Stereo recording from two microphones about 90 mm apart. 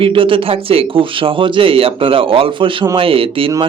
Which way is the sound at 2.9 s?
90° right.